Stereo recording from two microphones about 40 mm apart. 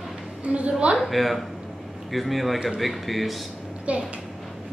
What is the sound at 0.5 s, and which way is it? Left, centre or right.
Speech, right.